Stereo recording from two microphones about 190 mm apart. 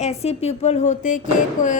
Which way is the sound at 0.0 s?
35° left (ahead or behind).